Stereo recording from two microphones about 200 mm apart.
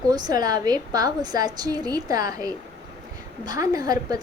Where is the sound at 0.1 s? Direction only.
20° right (ahead or behind).